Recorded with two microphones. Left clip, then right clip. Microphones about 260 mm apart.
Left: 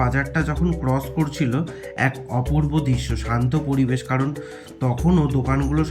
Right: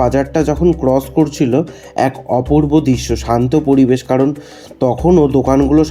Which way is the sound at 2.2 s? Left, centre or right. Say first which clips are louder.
Right 13 dB; right.